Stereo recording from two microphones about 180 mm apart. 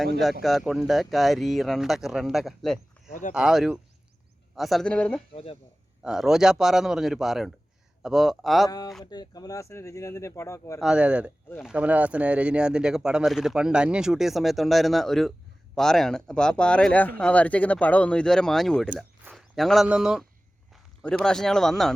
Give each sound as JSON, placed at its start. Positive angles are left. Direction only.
{"t": 0.4, "sound": "speech", "side_deg": 0}
{"t": 3.1, "sound": "speech", "side_deg": 45}
{"t": 3.3, "sound": "speech", "side_deg": -5}
{"t": 5.3, "sound": "speech", "side_deg": 30}
{"t": 6.0, "sound": "speech", "side_deg": -5}
{"t": 9.0, "sound": "speech", "side_deg": 20}
{"t": 10.8, "sound": "speech", "side_deg": -5}